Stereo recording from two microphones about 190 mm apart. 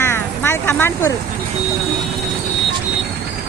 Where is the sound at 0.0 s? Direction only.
10° left (ahead or behind).